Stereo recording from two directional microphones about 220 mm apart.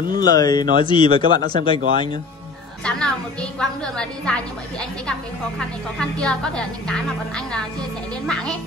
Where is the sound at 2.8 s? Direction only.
5° left (ahead or behind).